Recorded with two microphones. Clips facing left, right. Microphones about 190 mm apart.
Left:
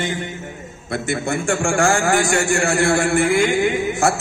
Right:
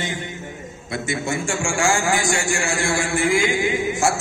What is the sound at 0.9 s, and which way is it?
A man's voice, 60° left (ahead or behind).